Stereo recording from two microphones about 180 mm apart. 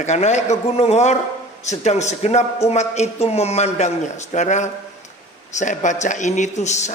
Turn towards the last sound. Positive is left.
turn(degrees=40)  # may be behind; listen again after turning